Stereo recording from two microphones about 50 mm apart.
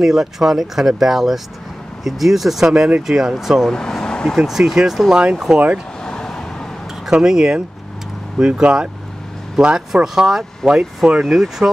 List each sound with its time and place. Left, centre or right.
0.0 s speech: centre
3.6 s speech: centre
4.4 s speech: centre
5.1 s speech: centre
6.0 s vehicle: centre
7.1 s speech: centre
9.6 s speech: centre